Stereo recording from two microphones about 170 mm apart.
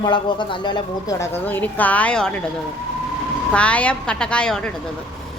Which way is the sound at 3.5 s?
5° left (ahead or behind).